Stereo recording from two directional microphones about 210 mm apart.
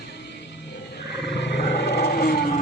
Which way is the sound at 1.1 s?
55° left (ahead or behind).